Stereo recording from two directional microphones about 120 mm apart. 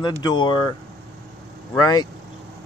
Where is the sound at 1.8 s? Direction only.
35° left (ahead or behind).